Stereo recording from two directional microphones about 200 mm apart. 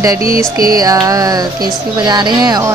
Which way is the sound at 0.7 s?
15° right (ahead or behind).